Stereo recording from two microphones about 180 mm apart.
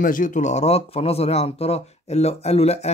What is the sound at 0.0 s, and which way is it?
Speech, 50° left (ahead or behind).